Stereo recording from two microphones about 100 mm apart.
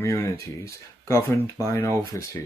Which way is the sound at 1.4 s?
30° left (ahead or behind).